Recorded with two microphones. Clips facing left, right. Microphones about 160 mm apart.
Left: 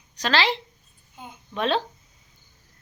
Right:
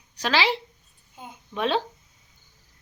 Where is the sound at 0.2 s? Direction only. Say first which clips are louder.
Even; 10° right (ahead or behind).